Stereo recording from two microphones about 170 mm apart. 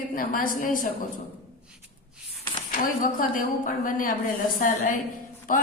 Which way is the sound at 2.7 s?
55° left (ahead or behind).